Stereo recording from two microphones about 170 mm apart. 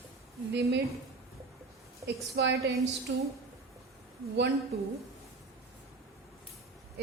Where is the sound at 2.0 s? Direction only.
85° right.